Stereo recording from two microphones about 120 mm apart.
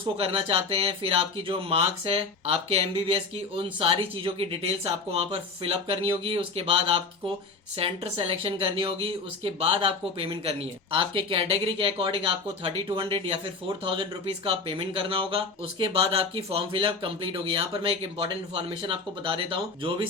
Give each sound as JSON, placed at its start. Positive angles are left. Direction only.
{"t": 0.0, "sound": "speech", "side_deg": -50}